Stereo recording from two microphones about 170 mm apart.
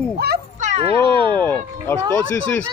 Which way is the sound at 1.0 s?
30° right (ahead or behind).